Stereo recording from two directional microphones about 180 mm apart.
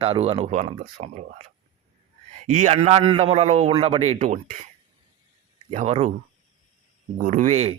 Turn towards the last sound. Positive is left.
turn(degrees=-35)  # may be behind; listen again after turning